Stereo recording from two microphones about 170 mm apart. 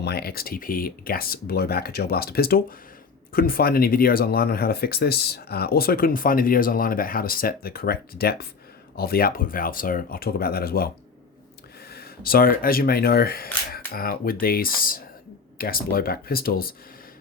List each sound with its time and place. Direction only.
0.0 s speech: 65° left (ahead or behind)
11.9 s speech: 65° left (ahead or behind)